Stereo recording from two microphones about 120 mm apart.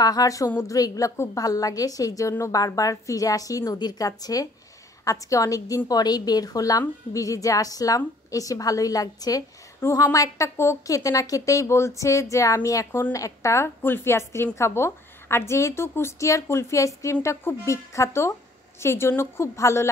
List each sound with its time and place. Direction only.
0.0 s a woman's voice: 30° left (ahead or behind)